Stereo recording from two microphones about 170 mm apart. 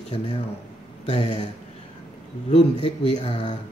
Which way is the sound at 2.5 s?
40° left (ahead or behind).